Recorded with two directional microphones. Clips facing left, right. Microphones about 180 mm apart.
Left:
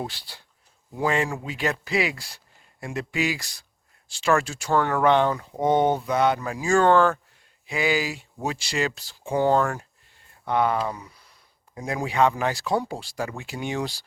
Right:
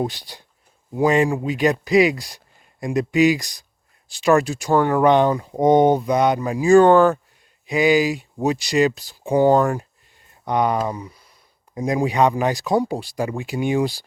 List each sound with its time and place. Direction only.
0.0 s speech: 15° right (ahead or behind)
11.0 s a sound: 10° right (ahead or behind)
11.7 s speech: 20° right (ahead or behind)